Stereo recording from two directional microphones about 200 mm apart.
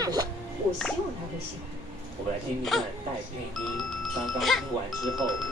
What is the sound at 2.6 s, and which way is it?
Speech, centre (ahead or behind).